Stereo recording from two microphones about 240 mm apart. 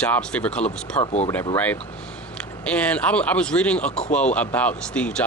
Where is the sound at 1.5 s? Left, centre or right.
Centre.